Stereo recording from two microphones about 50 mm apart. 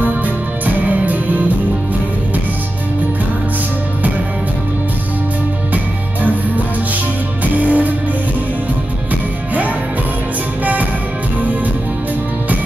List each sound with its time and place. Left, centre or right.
0.7 s music: right
7.5 s music: right
10.6 s music: right